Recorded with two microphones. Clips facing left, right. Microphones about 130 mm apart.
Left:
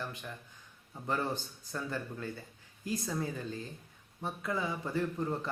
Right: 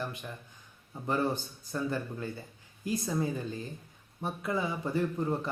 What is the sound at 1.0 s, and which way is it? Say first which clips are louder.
Speech: right 4 dB; 15° right (ahead or behind).